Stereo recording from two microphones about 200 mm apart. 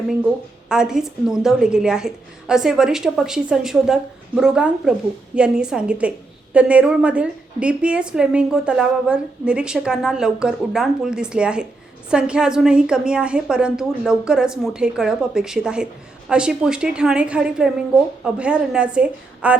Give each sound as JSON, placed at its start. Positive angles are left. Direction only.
{"t": 0.7, "sound": "a woman's voice", "side_deg": -5}